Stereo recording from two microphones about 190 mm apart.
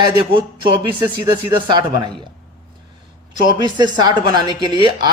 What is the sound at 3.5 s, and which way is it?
Speech, 20° right (ahead or behind).